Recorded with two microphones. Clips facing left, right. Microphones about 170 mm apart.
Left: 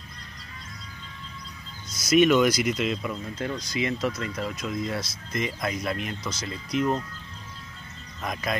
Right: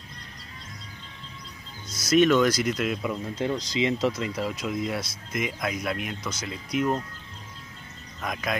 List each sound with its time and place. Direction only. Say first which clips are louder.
2.0 s speech: even; 15° left (ahead or behind)
3.0 s speech: right 3 dB; 20° right (ahead or behind)
8.2 s speech: even; centre (ahead or behind)